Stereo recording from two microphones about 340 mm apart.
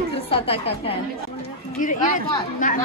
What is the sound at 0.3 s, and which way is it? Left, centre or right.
A woman's voice, centre.